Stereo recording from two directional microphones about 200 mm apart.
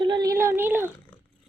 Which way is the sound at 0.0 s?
20° right (ahead or behind).